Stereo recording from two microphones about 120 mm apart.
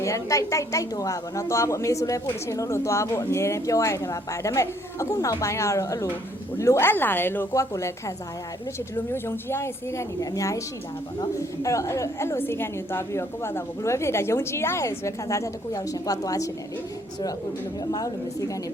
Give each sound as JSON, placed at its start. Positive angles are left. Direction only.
{"t": 0.0, "sound": "a woman's voice", "side_deg": 25}
{"t": 9.1, "sound": "a woman's voice", "side_deg": 20}
{"t": 17.9, "sound": "a woman's voice", "side_deg": 30}